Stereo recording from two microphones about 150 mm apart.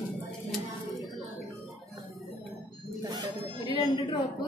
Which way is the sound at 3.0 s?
25° right (ahead or behind).